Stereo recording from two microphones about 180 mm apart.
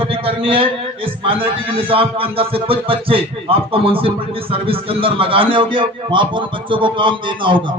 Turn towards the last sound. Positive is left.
turn(degrees=-25)  # may be behind; listen again after turning